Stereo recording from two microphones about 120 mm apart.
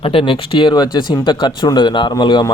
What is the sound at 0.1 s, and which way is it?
Speech, 45° left (ahead or behind).